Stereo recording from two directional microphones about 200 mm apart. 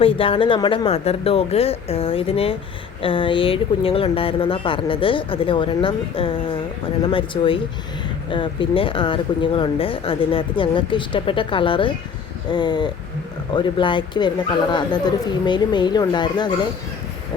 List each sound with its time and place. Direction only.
0.0 s speech: 25° left (ahead or behind)